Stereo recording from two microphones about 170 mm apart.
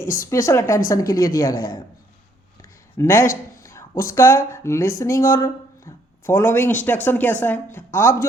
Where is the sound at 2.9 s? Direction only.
15° left (ahead or behind).